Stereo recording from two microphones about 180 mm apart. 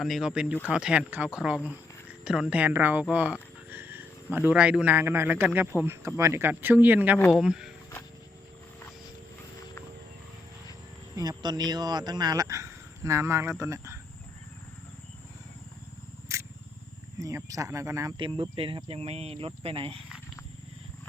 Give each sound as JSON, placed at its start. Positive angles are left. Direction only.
{"t": 0.0, "sound": "a man's voice", "side_deg": 0}
{"t": 11.1, "sound": "speech", "side_deg": -20}
{"t": 16.3, "sound": "single-lens reflex camera", "side_deg": -15}
{"t": 17.2, "sound": "speech", "side_deg": -20}